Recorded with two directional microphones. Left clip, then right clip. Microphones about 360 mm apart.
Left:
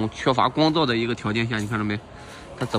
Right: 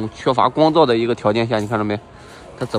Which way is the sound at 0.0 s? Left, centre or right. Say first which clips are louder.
Right 4 dB; centre.